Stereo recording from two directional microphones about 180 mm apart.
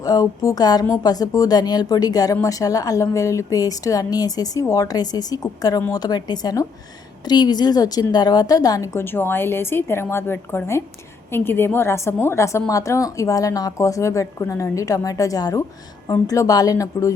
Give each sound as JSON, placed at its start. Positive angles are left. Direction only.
{"t": 0.0, "sound": "a woman's voice", "side_deg": 20}